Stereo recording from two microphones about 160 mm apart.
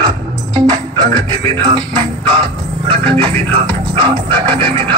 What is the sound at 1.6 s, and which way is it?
Music, 30° right (ahead or behind).